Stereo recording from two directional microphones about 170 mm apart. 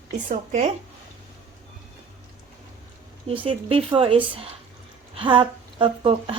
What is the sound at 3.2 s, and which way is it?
A woman's voice, 30° right (ahead or behind).